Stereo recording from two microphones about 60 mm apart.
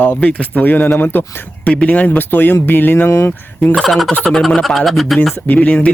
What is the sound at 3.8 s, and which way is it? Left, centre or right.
Speech, centre.